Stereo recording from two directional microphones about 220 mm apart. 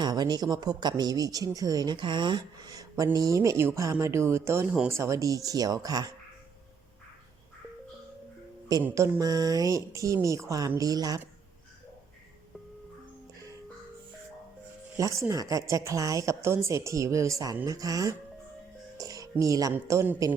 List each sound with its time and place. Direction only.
0.0 s a woman's voice: 20° right (ahead or behind)
8.7 s a woman's voice: 10° right (ahead or behind)
14.9 s a woman's voice: 15° right (ahead or behind)